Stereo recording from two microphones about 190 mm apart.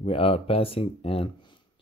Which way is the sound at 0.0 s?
30° left (ahead or behind).